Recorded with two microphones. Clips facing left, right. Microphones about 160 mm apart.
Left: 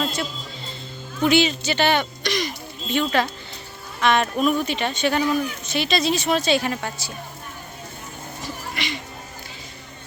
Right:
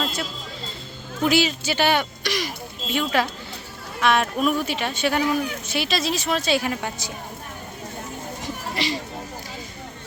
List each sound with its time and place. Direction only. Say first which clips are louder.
0.0 s a sound: left 2 dB; centre (ahead or behind)
1.2 s a woman's voice: left 2 dB; centre (ahead or behind)
8.7 s speech: right 5 dB; 35° right (ahead or behind)